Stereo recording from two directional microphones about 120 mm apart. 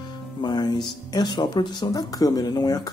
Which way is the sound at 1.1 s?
35° left (ahead or behind).